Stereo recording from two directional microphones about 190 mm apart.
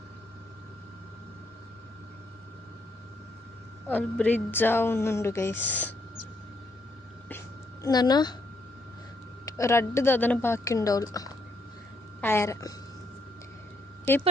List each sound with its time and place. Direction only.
3.8 s a woman's voice: 10° left (ahead or behind)
7.3 s a sound: 15° left (ahead or behind)
9.5 s a woman's voice: 15° left (ahead or behind)